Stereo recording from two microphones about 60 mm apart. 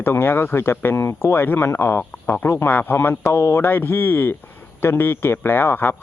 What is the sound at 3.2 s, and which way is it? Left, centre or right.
A man's voice, left.